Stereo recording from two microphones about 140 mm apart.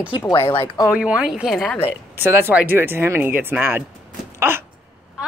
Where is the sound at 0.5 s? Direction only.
35° left (ahead or behind).